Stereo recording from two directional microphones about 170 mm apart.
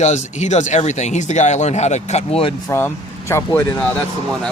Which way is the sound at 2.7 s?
15° left (ahead or behind).